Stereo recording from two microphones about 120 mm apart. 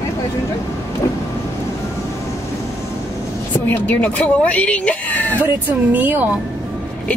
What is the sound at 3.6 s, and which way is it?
Speech, 15° left (ahead or behind).